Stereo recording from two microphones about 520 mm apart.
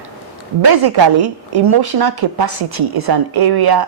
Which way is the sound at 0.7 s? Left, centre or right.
Right.